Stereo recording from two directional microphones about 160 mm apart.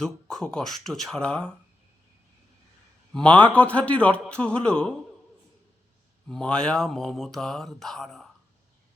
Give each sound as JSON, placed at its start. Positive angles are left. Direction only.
{"t": 0.0, "sound": "mantra", "side_deg": 5}
{"t": 3.1, "sound": "a man's voice", "side_deg": 5}
{"t": 6.2, "sound": "mantra", "side_deg": 5}